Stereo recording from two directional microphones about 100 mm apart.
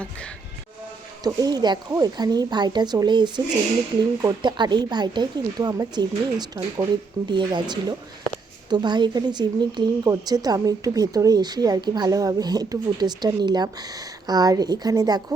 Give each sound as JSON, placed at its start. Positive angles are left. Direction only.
{"t": 1.2, "sound": "speech", "side_deg": -40}
{"t": 4.4, "sound": "a woman's voice", "side_deg": -45}